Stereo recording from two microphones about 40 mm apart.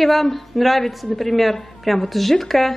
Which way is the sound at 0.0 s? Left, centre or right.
Centre.